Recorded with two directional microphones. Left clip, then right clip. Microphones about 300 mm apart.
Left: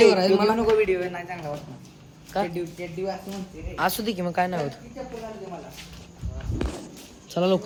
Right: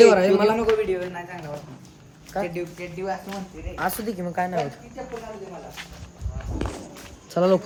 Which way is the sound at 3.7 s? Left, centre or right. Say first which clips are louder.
Left 2 dB; centre.